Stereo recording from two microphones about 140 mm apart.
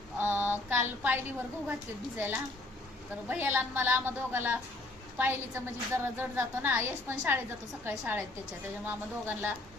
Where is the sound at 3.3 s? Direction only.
15° right (ahead or behind).